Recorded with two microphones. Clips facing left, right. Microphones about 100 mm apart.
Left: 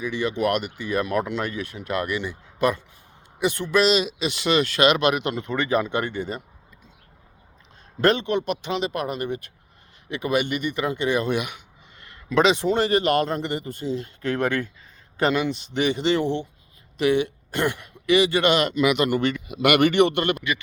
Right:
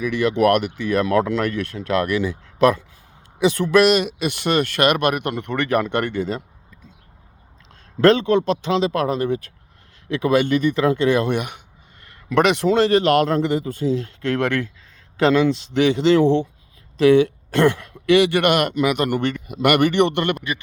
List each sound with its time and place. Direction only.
0.0 s a man's voice: 90° right
8.6 s a man's voice: 90° right
10.1 s a man's voice: 90° right
11.3 s a sound: 50° right (ahead or behind)
12.3 s a man's voice: 60° right (ahead or behind)